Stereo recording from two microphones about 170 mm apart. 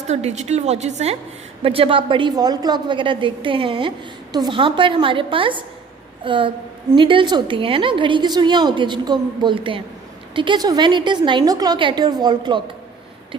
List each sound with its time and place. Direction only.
0.1 s a woman's voice: 40° right (ahead or behind)